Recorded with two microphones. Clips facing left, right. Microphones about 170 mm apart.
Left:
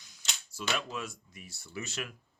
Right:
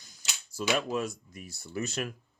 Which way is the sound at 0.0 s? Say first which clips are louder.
Even; 40° right (ahead or behind).